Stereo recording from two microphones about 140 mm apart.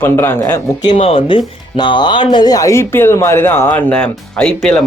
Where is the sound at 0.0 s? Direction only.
15° left (ahead or behind).